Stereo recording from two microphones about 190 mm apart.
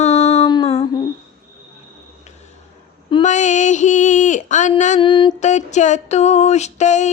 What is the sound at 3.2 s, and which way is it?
Female singing, 40° left (ahead or behind).